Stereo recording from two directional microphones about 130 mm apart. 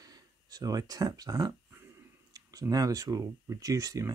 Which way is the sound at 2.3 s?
30° right (ahead or behind).